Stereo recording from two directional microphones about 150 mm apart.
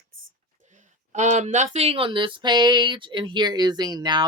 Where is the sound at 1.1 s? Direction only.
50° right (ahead or behind).